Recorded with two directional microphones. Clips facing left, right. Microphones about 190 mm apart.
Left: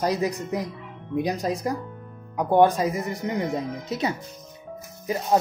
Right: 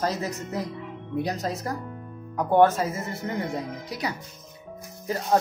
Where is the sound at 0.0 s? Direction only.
15° left (ahead or behind).